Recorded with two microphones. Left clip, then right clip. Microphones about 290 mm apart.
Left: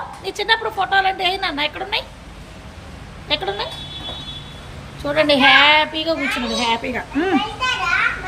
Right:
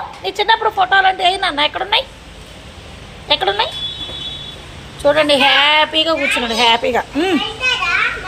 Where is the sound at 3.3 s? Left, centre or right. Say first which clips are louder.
Right 7 dB; centre.